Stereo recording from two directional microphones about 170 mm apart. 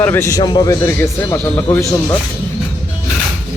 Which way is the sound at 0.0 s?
15° left (ahead or behind).